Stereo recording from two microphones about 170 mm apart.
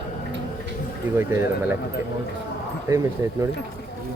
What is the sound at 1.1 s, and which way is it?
Speech, 15° right (ahead or behind).